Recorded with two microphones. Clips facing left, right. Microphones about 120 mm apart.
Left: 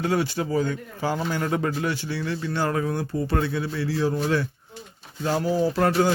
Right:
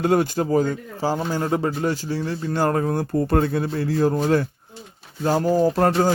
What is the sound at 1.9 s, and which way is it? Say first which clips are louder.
Speech: right 3 dB; 40° right (ahead or behind).